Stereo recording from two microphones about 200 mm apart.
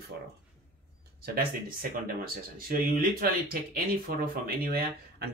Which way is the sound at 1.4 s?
45° right (ahead or behind).